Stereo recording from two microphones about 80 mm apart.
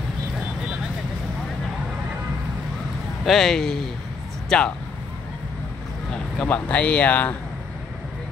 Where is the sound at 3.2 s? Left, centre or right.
Centre.